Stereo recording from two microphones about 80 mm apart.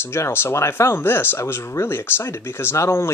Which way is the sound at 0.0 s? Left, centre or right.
Left.